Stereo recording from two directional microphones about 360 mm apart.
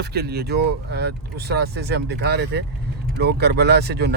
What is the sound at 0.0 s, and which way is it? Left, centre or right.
Speech, right.